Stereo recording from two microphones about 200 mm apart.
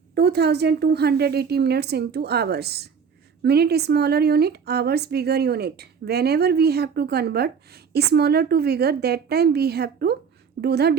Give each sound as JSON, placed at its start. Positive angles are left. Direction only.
{"t": 0.1, "sound": "a woman's voice", "side_deg": -55}